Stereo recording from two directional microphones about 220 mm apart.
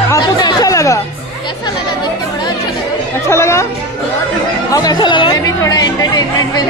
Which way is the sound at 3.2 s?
10° left (ahead or behind).